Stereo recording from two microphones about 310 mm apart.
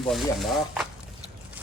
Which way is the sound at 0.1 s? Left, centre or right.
Centre.